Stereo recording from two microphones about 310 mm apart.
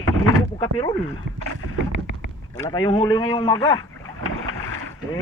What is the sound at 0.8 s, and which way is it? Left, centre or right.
Speech, centre.